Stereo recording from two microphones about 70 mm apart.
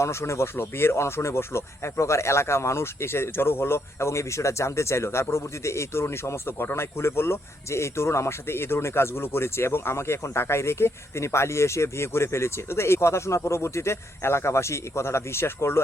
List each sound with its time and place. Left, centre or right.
0.0 s speech: left